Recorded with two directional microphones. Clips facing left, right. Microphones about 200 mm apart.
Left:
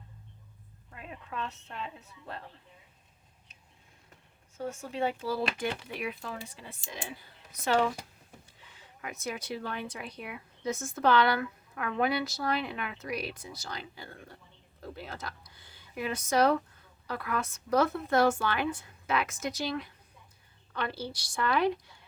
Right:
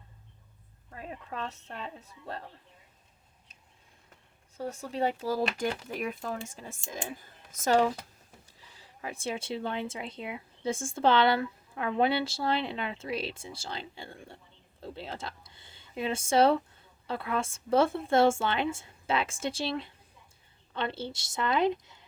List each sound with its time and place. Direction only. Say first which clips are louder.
0.9 s a woman's voice: right 3 dB; 35° right (ahead or behind)
4.5 s a woman's voice: right 1 dB; 35° right (ahead or behind); by 22.0 s 20° right (ahead or behind)